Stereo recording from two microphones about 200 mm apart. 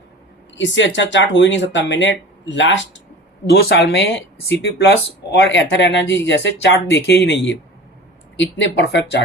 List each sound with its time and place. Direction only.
0.5 s speech: 65° left (ahead or behind)